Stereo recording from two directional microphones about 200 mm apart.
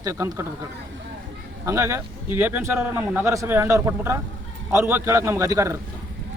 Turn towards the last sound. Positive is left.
turn(degrees=-15)  # may be behind; listen again after turning